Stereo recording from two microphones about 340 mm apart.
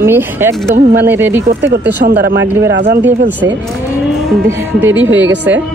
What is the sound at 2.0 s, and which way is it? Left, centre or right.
Speech, right.